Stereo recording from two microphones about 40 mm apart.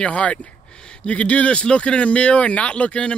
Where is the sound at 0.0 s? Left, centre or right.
Left.